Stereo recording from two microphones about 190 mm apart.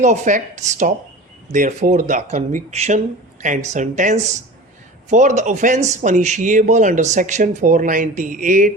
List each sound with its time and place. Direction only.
0.0 s speech: 40° right (ahead or behind)